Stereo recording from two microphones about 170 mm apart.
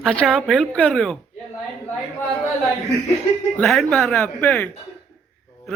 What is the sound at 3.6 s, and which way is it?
Speech, 5° left (ahead or behind).